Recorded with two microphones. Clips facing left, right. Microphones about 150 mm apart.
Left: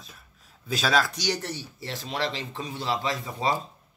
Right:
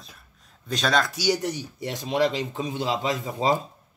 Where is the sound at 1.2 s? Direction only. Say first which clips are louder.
Right 5 dB; 15° right (ahead or behind).